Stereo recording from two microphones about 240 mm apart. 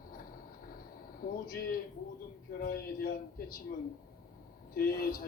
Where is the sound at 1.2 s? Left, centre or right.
Left.